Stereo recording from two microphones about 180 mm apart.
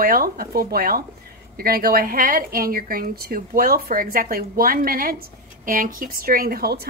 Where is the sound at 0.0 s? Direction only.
55° right (ahead or behind).